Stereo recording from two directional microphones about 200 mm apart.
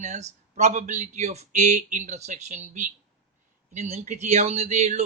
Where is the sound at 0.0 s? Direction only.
35° right (ahead or behind).